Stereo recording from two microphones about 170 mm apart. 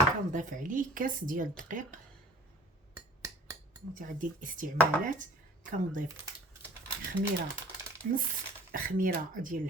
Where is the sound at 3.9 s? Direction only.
50° right (ahead or behind).